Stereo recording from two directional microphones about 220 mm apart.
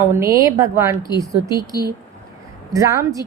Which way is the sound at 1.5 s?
15° left (ahead or behind).